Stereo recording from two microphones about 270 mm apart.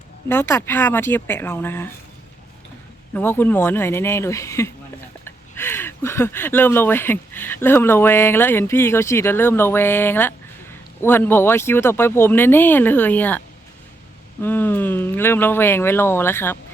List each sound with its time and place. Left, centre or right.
0.3 s speech: centre
3.2 s speech: centre
14.4 s speech: centre